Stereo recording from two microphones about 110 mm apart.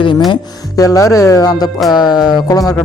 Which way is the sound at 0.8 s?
30° left (ahead or behind).